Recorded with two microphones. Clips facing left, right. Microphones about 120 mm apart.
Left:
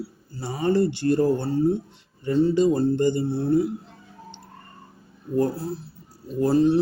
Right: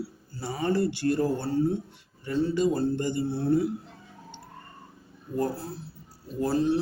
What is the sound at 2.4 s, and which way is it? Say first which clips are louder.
Speech: left 4 dB; 20° left (ahead or behind).